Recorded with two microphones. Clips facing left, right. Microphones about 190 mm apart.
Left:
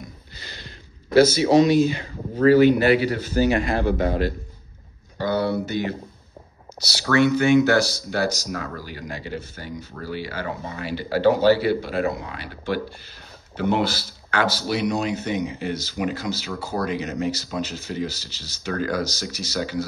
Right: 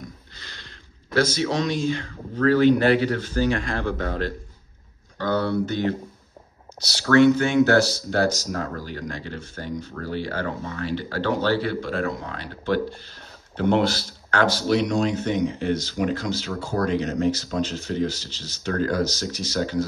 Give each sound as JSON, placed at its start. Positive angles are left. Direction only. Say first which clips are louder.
{"t": 0.4, "sound": "speech", "louder": "left 4 dB", "side_deg": 5}
{"t": 8.5, "sound": "speech", "louder": "right 2 dB", "side_deg": -45}
{"t": 8.8, "sound": "speech", "louder": "right 1 dB", "side_deg": 10}
{"t": 10.3, "sound": "speech", "louder": "right 1 dB", "side_deg": -55}
{"t": 10.8, "sound": "speech", "louder": "left 6 dB", "side_deg": 10}